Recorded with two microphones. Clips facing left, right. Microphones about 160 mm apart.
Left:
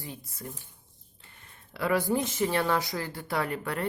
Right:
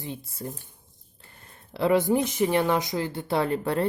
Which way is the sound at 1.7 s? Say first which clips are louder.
Right 5 dB; 25° right (ahead or behind).